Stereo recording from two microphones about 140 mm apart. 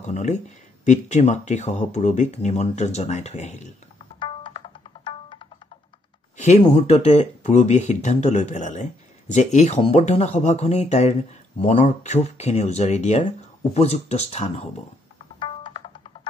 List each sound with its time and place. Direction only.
0.0 s speech: 55° left (ahead or behind)
4.2 s music: 35° left (ahead or behind)
6.3 s speech: 50° left (ahead or behind)
15.3 s music: 35° left (ahead or behind)